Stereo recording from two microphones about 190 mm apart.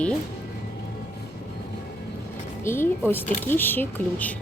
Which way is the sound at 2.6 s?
10° left (ahead or behind).